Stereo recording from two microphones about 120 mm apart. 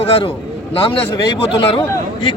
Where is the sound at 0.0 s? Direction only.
55° left (ahead or behind).